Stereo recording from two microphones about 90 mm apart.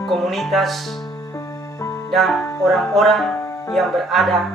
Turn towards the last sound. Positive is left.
turn(degrees=0)  # may be behind; listen again after turning